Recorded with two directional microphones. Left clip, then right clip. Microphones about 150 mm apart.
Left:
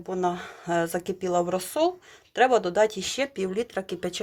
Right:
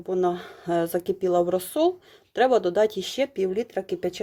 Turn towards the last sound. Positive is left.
turn(degrees=-30)  # may be behind; listen again after turning